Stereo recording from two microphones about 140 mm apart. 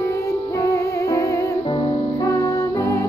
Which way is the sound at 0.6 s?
20° left (ahead or behind).